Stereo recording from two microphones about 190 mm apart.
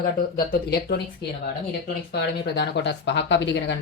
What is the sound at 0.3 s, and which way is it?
Speech, 55° left (ahead or behind).